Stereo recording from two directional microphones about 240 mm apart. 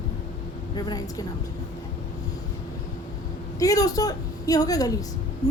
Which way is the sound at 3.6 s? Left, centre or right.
Centre.